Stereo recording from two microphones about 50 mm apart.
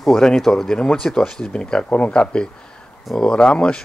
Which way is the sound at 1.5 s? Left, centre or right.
Left.